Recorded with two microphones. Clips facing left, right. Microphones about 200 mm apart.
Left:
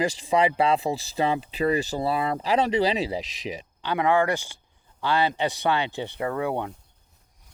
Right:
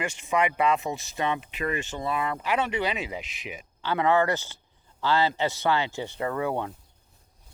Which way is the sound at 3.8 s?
15° left (ahead or behind).